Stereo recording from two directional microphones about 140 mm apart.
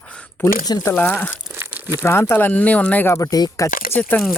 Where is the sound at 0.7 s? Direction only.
25° left (ahead or behind).